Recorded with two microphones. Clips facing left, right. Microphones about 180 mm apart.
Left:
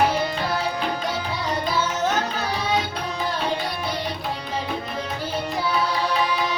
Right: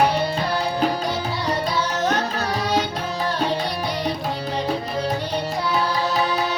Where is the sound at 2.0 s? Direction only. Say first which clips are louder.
Right 2 dB; centre (ahead or behind).